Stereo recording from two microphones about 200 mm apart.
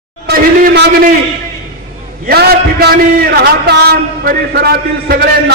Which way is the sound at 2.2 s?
50° right (ahead or behind).